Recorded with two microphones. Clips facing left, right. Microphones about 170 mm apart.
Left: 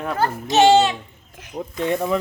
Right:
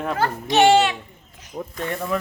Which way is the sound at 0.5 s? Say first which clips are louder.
Left 1 dB; 25° left (ahead or behind).